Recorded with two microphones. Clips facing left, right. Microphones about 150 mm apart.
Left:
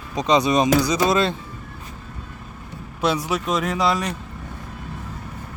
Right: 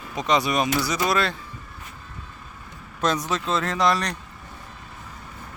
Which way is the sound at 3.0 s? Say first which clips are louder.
Left 2 dB; 10° left (ahead or behind).